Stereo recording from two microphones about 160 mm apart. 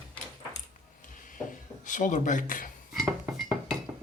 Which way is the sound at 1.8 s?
55° left (ahead or behind).